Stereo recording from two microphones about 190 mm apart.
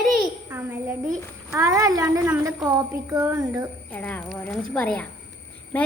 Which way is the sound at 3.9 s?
10° left (ahead or behind).